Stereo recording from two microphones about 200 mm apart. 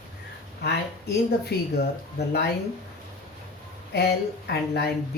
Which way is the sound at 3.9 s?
55° left (ahead or behind).